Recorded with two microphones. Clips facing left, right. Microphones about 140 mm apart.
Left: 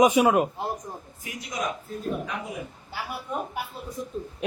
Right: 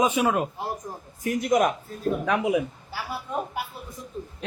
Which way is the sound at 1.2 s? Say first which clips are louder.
Right 11 dB; 50° right (ahead or behind).